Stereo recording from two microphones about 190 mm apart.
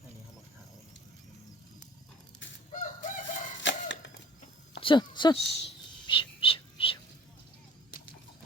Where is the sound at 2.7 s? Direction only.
40° left (ahead or behind).